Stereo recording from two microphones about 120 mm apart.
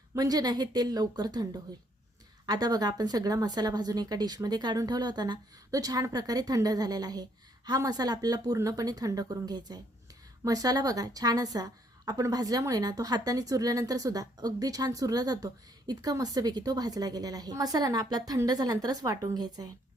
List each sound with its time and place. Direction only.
0.1 s a woman's voice: 30° right (ahead or behind)